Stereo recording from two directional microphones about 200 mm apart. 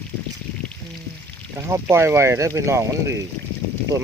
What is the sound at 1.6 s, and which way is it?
Speech, 15° right (ahead or behind).